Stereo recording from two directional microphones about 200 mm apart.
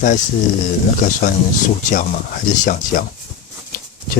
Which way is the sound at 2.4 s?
40° left (ahead or behind).